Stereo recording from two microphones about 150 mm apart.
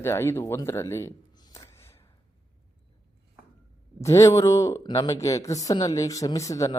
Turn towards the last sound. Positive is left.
turn(degrees=20)  # may be behind; listen again after turning